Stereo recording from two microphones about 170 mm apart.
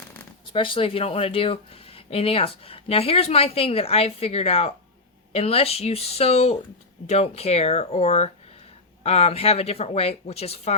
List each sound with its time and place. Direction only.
0.5 s speech: 30° left (ahead or behind)